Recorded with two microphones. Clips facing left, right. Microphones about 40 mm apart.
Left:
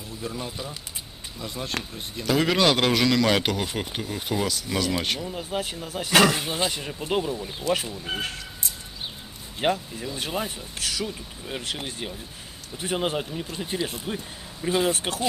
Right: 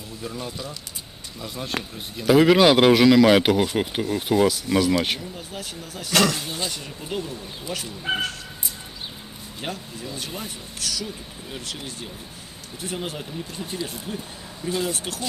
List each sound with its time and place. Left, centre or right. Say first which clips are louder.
0.2 s speech: even; centre
0.5 s speech: right 1 dB; centre
1.4 s speech: right 1 dB; centre
5.3 s speech: left 5 dB; left
9.6 s speech: left 8 dB; left